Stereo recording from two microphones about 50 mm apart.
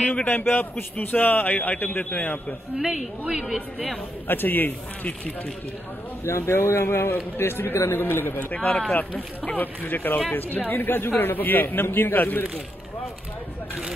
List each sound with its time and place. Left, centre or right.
0.0 s a man's voice: left
0.3 s a man's voice: left
2.8 s a woman's voice: centre
4.3 s a man's voice: left
6.2 s a man's voice: left
9.1 s speech: centre
9.6 s a man's voice: left